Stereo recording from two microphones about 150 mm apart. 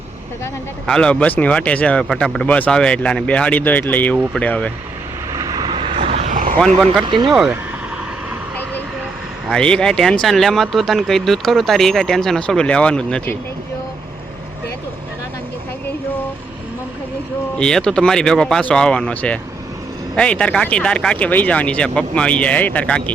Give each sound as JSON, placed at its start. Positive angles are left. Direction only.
{"t": 0.9, "sound": "speech", "side_deg": 5}
{"t": 5.3, "sound": "vehicle", "side_deg": -25}
{"t": 6.3, "sound": "vehicle", "side_deg": -60}
{"t": 7.0, "sound": "speech", "side_deg": -35}
{"t": 7.3, "sound": "speech", "side_deg": 0}
{"t": 9.5, "sound": "speech", "side_deg": 5}
{"t": 17.6, "sound": "speech", "side_deg": 5}